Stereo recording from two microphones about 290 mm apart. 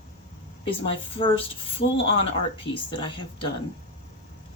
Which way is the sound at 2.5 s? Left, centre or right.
Centre.